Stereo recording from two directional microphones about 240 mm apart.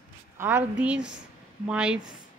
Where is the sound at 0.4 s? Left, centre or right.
Centre.